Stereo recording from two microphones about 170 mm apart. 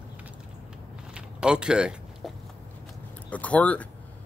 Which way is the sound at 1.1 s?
5° right (ahead or behind).